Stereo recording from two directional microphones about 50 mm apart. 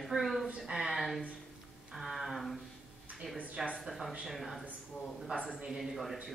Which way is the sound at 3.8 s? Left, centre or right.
Centre.